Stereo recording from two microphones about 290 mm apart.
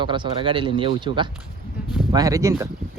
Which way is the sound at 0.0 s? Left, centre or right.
Centre.